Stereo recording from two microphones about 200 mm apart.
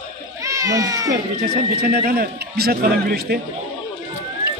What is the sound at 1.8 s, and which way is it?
A man's voice, 50° right (ahead or behind).